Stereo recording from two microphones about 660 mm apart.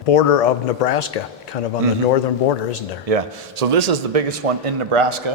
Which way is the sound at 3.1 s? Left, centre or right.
Right.